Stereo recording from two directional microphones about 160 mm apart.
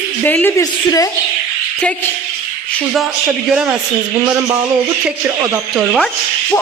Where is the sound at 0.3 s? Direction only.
10° left (ahead or behind).